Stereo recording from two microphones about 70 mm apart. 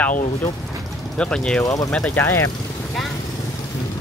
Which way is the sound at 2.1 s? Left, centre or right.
Left.